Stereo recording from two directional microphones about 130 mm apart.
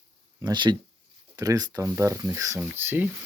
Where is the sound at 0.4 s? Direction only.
35° right (ahead or behind); by 3.1 s 15° right (ahead or behind).